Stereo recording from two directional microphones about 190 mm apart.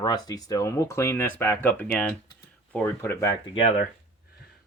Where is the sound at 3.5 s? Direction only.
30° left (ahead or behind).